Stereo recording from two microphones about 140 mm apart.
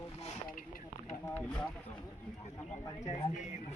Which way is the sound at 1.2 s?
10° left (ahead or behind).